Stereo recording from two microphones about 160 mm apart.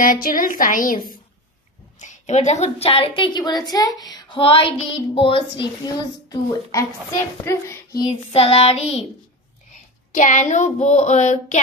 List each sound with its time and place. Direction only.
0.0 s a woman's voice: 60° left (ahead or behind)
2.0 s a woman's voice: 45° left (ahead or behind)
6.2 s a woman's voice: 20° left (ahead or behind)
8.1 s a woman's voice: 40° left (ahead or behind)
10.1 s child singing: 50° left (ahead or behind)